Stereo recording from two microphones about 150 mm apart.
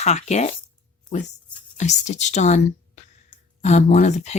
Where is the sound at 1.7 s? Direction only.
50° left (ahead or behind).